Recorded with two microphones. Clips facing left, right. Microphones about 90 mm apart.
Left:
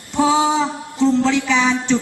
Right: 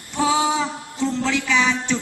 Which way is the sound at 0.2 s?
20° left (ahead or behind).